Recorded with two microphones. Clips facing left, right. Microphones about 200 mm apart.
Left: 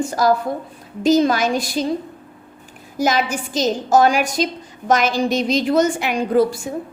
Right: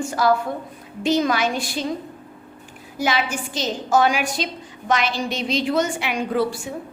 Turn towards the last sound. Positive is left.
turn(degrees=40)  # may be behind; listen again after turning